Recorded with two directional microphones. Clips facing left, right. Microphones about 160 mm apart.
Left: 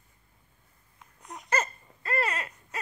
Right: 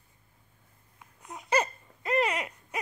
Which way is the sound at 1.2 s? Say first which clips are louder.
Right 3 dB; 10° right (ahead or behind).